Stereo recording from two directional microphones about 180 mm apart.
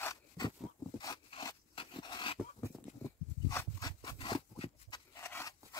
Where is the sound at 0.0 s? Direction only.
20° left (ahead or behind).